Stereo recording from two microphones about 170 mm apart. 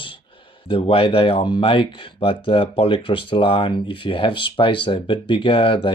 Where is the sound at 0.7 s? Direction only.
30° left (ahead or behind).